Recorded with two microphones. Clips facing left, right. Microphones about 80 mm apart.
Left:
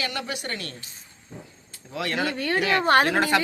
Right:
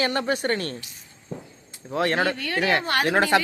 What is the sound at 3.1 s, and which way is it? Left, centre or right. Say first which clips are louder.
Speech: right 2 dB; right.